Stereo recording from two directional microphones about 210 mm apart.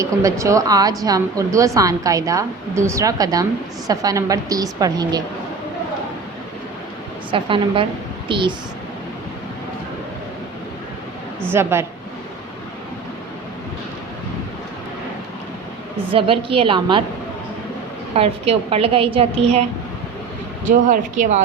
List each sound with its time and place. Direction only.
0.0 s a woman's voice: 15° right (ahead or behind)
7.3 s a woman's voice: 25° right (ahead or behind)
11.4 s a woman's voice: 10° right (ahead or behind)
16.1 s a woman's voice: 25° right (ahead or behind)
18.1 s a woman's voice: 25° right (ahead or behind)
20.7 s speech: 35° right (ahead or behind)